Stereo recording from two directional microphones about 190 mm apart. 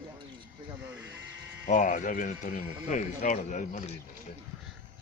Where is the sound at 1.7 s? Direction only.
40° left (ahead or behind).